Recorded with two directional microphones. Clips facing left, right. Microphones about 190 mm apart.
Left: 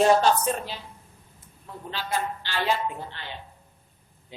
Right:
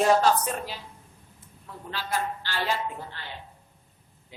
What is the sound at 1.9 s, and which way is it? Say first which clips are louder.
A woman's voice: left 1 dB; 20° left (ahead or behind).